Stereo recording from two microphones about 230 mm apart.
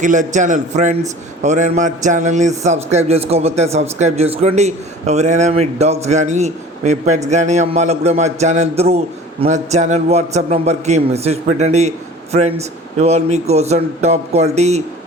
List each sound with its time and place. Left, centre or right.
0.0 s a man's voice: right